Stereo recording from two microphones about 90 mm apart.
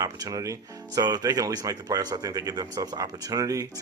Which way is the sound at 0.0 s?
45° right (ahead or behind).